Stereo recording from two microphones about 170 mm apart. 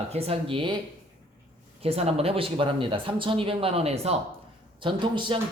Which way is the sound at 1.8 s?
35° right (ahead or behind).